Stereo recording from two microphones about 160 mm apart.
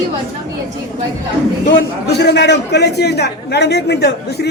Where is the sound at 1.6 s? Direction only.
90° left.